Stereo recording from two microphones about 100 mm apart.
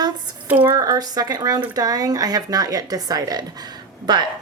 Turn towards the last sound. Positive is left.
turn(degrees=-45)  # may be behind; listen again after turning